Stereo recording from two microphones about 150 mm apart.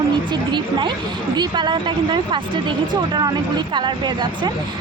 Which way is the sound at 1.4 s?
30° right (ahead or behind).